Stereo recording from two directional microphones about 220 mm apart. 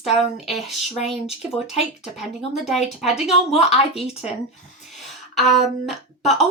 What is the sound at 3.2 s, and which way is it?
Speech, 30° left (ahead or behind).